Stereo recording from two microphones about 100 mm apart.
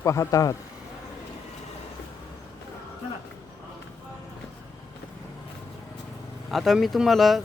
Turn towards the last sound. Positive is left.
turn(degrees=0)  # may be behind; listen again after turning